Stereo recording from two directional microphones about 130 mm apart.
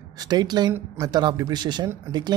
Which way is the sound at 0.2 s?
30° right (ahead or behind).